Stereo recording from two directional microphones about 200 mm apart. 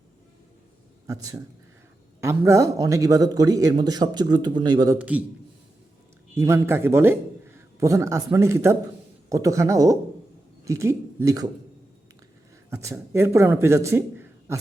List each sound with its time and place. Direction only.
1.0 s a man's voice: 15° right (ahead or behind)
4.9 s a man's voice: 5° right (ahead or behind)
6.3 s a man's voice: 15° right (ahead or behind)
12.7 s a man's voice: 15° right (ahead or behind)